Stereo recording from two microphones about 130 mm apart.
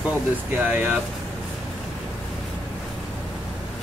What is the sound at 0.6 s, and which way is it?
Speech, 10° right (ahead or behind).